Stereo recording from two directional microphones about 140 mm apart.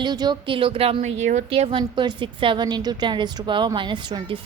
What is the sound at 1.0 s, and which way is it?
Speech, 60° right (ahead or behind).